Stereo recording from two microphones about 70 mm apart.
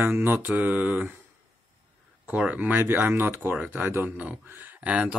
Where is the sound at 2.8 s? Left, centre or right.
Right.